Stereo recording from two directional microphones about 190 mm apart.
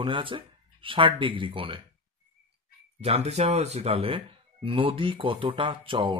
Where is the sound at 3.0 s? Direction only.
35° right (ahead or behind).